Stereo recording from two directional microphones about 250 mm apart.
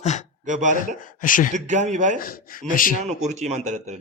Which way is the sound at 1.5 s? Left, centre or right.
Right.